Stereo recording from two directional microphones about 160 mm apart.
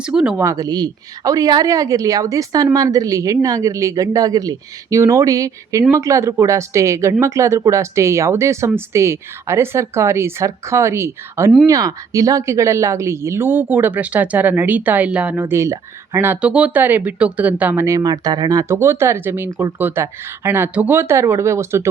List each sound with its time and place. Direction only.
0.0 s speech: 5° right (ahead or behind)
0.3 s a woman's voice: 20° right (ahead or behind)